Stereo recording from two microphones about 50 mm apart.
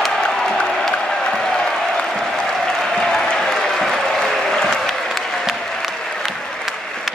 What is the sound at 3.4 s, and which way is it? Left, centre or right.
Applause, centre.